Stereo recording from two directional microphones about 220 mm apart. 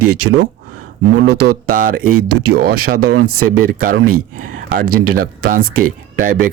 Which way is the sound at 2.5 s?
45° right (ahead or behind).